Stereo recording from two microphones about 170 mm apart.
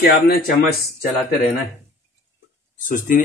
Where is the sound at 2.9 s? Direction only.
50° left (ahead or behind).